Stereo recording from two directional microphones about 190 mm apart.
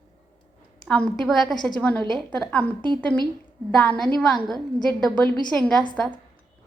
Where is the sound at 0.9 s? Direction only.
5° left (ahead or behind).